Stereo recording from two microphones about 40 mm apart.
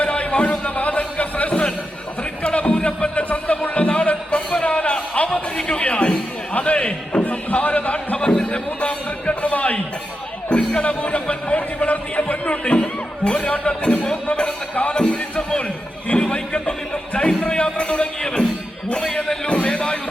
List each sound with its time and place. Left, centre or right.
0.0 s a sound: left
3.2 s music: left
5.8 s a sound: left
10.5 s music: left
10.8 s music: left
19.5 s music: left